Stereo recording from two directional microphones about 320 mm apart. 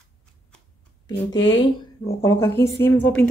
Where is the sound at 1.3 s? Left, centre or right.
Left.